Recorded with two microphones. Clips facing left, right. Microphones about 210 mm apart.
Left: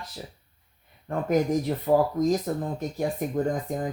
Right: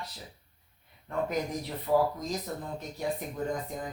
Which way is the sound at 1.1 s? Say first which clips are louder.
Left 7 dB; 50° left (ahead or behind).